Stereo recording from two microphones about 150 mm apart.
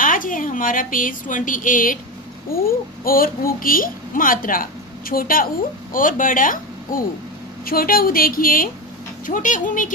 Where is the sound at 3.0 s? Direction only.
75° left (ahead or behind).